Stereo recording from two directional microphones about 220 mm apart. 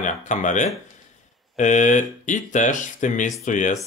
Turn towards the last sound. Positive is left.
turn(degrees=35)  # may be behind; listen again after turning